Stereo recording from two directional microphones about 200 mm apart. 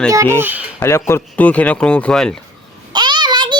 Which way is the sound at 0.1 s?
15° right (ahead or behind).